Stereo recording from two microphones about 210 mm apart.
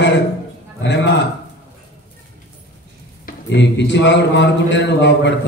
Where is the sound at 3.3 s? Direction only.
55° left (ahead or behind).